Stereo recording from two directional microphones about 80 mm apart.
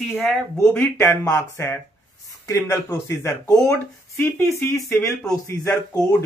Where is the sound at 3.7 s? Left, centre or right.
Left.